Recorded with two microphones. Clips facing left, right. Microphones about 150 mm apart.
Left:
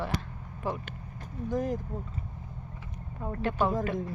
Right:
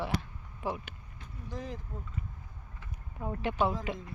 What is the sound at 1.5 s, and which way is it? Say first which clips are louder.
Speech: left 10 dB; 45° left (ahead or behind).